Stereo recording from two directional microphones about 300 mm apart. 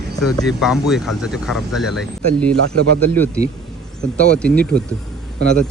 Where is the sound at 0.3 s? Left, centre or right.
Centre.